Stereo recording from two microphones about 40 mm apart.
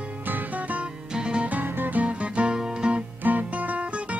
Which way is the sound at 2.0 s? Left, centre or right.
Right.